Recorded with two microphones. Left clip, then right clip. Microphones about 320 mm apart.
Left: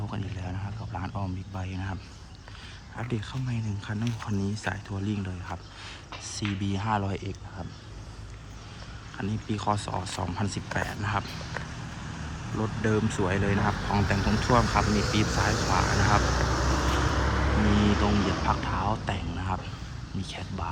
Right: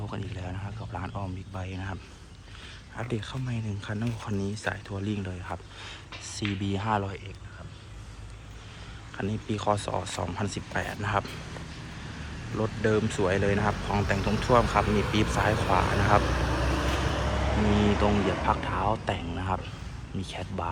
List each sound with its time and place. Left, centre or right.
0.0 s speech: centre
9.1 s speech: centre
12.5 s speech: centre
14.8 s speech: right
15.1 s speech: centre
16.2 s vehicle: right
18.4 s speech: centre